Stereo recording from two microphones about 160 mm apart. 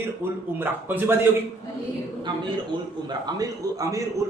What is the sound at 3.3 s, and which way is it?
Speech, 20° right (ahead or behind).